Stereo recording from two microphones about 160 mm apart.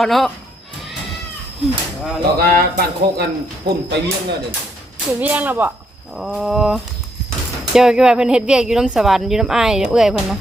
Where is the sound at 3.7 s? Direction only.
30° right (ahead or behind).